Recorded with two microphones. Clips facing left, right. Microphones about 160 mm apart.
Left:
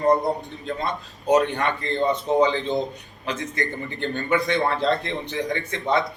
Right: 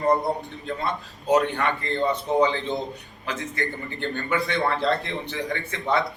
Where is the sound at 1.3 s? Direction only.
20° left (ahead or behind).